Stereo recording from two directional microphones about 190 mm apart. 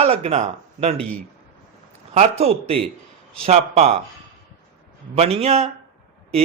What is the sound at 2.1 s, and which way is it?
A man's voice, 35° right (ahead or behind).